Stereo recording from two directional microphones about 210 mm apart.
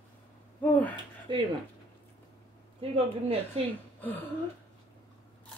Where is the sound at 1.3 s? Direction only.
20° right (ahead or behind).